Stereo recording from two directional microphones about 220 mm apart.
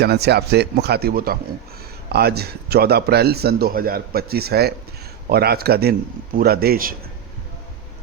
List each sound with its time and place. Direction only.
0.0 s a man's voice: 50° right (ahead or behind)